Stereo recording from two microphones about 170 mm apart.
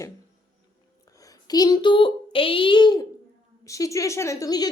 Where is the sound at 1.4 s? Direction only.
20° left (ahead or behind).